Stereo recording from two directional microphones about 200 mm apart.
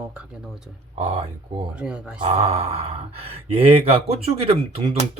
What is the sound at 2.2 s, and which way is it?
Speech, 30° right (ahead or behind).